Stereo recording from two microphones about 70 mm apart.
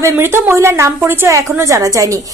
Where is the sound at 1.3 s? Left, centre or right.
Right.